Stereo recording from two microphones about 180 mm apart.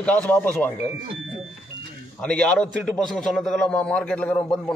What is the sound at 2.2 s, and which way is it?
A man's voice, 5° left (ahead or behind).